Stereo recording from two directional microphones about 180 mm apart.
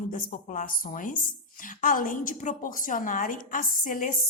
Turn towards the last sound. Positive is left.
turn(degrees=50)  # may be behind; listen again after turning